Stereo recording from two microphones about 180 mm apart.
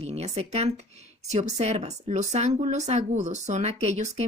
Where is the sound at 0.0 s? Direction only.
35° right (ahead or behind).